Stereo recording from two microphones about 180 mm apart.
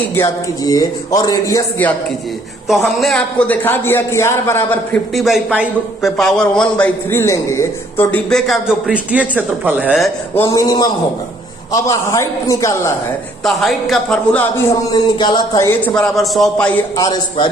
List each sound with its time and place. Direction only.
0.2 s a man's voice: 20° left (ahead or behind)
2.6 s a man's voice: centre (ahead or behind)
10.5 s a man's voice: 20° left (ahead or behind)
13.4 s a man's voice: centre (ahead or behind)
14.9 s a man's voice: 25° left (ahead or behind); by 16.7 s 5° left (ahead or behind)